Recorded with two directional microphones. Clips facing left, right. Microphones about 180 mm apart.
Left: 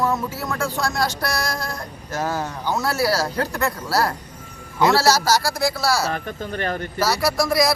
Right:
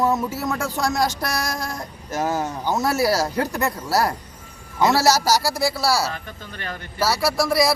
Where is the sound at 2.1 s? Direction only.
20° right (ahead or behind).